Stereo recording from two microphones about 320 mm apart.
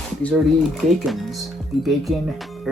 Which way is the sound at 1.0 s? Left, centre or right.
Centre.